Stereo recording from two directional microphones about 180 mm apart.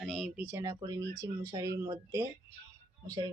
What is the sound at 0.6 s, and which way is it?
Speech, 20° right (ahead or behind).